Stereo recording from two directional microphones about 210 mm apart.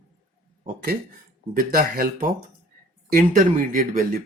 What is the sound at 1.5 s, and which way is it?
Speech, 40° right (ahead or behind).